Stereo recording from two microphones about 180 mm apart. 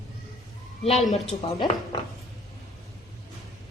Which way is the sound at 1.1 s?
35° left (ahead or behind).